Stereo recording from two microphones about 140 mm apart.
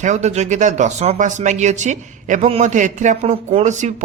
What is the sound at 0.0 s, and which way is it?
Speech, 55° right (ahead or behind).